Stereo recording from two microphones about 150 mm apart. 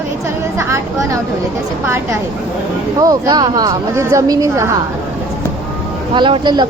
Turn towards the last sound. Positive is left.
turn(degrees=-30)  # may be behind; listen again after turning